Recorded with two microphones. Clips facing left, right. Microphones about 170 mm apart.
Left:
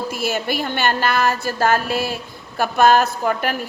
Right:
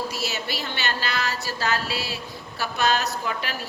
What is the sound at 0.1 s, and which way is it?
A woman's voice, 55° left (ahead or behind).